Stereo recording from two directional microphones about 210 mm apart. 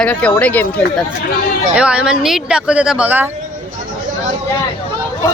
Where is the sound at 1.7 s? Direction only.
5° right (ahead or behind).